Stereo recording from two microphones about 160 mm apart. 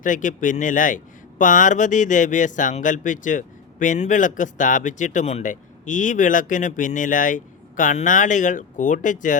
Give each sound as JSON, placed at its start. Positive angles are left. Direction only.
{"t": 0.0, "sound": "speech", "side_deg": 55}